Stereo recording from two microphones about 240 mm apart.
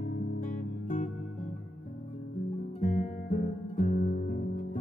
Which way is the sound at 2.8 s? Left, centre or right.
Left.